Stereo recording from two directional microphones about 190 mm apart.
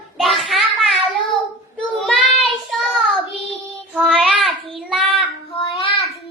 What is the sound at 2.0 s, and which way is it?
Child singing, centre (ahead or behind).